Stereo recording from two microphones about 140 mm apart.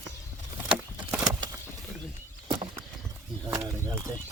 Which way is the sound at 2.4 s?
30° right (ahead or behind).